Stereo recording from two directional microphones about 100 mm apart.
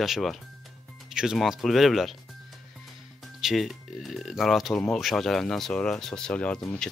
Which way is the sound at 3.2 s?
Centre (ahead or behind).